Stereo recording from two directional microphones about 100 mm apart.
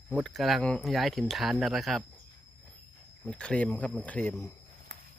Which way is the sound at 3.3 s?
10° left (ahead or behind).